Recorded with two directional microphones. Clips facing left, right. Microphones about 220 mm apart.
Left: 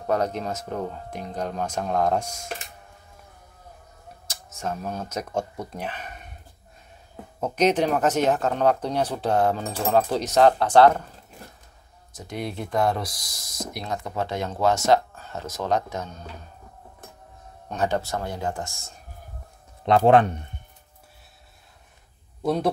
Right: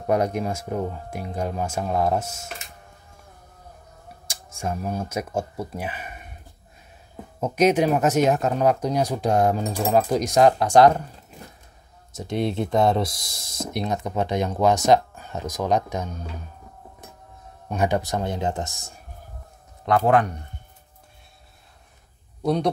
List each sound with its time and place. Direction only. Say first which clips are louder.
0.0 s speech: right 2 dB; 15° right (ahead or behind)
4.3 s speech: right 1 dB; 10° right (ahead or behind)
7.3 s speech: right 2 dB; 10° right (ahead or behind)
12.1 s speech: right 7 dB; 25° right (ahead or behind)
17.6 s speech: right 2 dB; 10° right (ahead or behind)
20.1 s speech: left 3 dB; 25° left (ahead or behind)
22.4 s a man's voice: right 1 dB; 5° left (ahead or behind)